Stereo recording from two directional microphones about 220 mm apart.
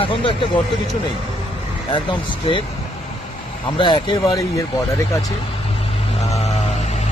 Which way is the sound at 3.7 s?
20° left (ahead or behind).